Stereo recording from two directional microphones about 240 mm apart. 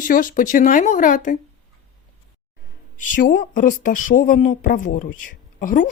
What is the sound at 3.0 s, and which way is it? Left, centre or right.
A woman's voice, left.